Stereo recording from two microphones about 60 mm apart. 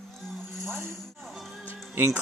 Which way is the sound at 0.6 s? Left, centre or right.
Right.